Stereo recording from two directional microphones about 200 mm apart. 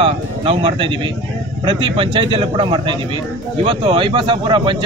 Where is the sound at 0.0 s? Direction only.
30° right (ahead or behind).